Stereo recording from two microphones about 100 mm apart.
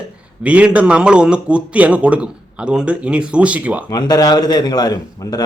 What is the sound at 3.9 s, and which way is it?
A man's voice, 40° left (ahead or behind).